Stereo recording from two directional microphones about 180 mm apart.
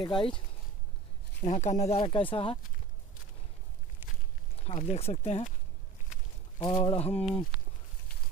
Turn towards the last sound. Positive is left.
turn(degrees=35)  # may be behind; listen again after turning